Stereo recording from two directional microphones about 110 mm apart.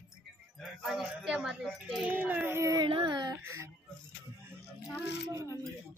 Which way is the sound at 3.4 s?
25° right (ahead or behind).